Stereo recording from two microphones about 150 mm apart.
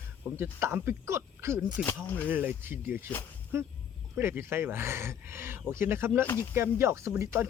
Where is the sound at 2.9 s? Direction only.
15° right (ahead or behind).